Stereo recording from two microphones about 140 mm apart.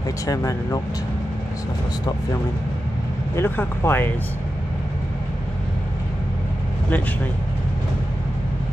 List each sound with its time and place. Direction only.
0.3 s speech: 20° left (ahead or behind)
3.3 s speech: 15° left (ahead or behind)